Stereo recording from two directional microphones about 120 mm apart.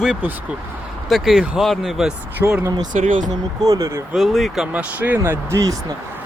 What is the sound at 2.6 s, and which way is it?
Speech, 30° right (ahead or behind).